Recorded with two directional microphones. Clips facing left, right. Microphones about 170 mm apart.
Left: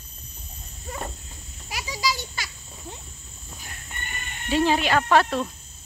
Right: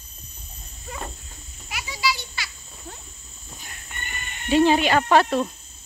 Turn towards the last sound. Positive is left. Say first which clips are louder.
# right 2 dB
turn(degrees=0)  # may be behind; listen again after turning